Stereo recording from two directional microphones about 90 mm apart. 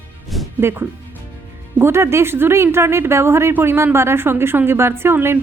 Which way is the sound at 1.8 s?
30° right (ahead or behind).